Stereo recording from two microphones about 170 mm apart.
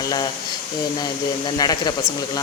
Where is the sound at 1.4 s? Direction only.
25° left (ahead or behind).